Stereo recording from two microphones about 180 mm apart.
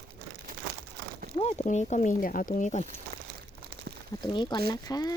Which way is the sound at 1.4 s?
35° left (ahead or behind).